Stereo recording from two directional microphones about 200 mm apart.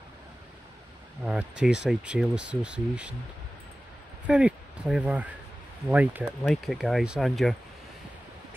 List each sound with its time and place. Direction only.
1.2 s speech: 5° right (ahead or behind)
4.3 s speech: 5° right (ahead or behind)